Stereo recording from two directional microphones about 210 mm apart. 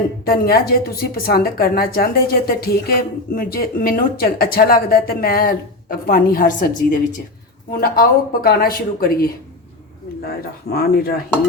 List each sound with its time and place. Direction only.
0.3 s a woman's voice: 45° left (ahead or behind)